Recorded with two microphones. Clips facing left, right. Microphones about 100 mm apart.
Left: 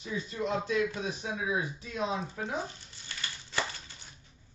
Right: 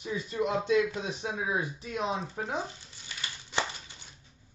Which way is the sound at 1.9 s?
25° right (ahead or behind).